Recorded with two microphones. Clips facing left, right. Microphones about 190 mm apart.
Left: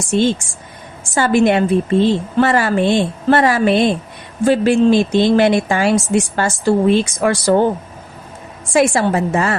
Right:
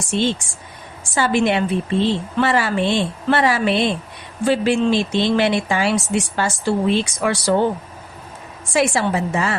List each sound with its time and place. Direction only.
0.1 s speech: 45° left (ahead or behind)
8.7 s speech: 50° left (ahead or behind)